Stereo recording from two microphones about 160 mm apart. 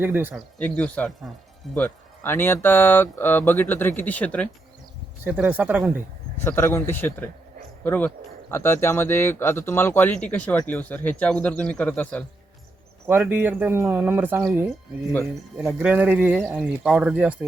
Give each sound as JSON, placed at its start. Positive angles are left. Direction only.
{"t": 0.0, "sound": "speech", "side_deg": -10}
{"t": 0.3, "sound": "speech", "side_deg": 10}
{"t": 5.2, "sound": "speech", "side_deg": -10}
{"t": 6.3, "sound": "speech", "side_deg": 15}
{"t": 13.1, "sound": "speech", "side_deg": -10}